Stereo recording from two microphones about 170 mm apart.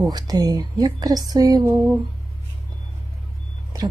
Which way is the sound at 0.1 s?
25° right (ahead or behind).